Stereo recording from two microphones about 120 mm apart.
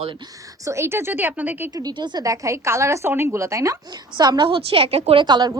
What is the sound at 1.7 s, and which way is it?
Speech, 35° right (ahead or behind).